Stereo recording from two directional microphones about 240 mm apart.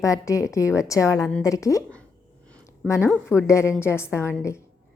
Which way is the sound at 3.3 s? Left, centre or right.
Centre.